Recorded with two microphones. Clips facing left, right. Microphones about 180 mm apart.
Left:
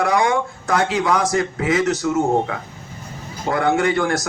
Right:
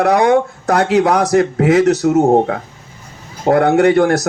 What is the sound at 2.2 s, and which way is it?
Speech, 45° right (ahead or behind).